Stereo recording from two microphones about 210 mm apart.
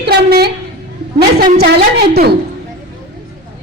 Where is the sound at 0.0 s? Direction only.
50° right (ahead or behind).